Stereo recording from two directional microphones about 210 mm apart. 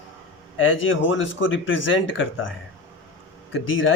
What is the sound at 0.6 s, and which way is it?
Speech, 65° left (ahead or behind).